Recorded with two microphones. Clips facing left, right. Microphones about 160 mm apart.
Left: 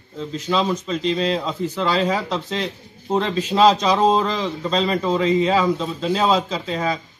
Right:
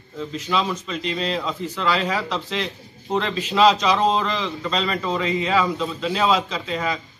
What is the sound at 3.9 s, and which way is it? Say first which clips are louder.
Speech: left 3 dB; 25° left (ahead or behind).